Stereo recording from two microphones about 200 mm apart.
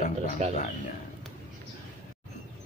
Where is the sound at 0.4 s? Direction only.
35° right (ahead or behind).